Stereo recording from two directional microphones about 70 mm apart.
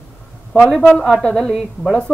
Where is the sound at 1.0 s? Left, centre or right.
Centre.